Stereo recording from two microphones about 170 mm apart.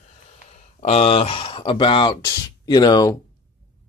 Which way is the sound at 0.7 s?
35° left (ahead or behind).